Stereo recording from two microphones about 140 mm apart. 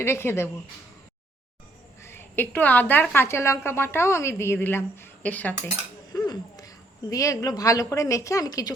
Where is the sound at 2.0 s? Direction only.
15° left (ahead or behind).